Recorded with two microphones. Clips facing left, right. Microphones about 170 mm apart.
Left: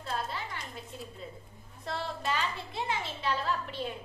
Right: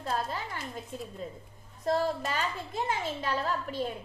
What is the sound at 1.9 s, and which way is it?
A woman's voice, 45° right (ahead or behind).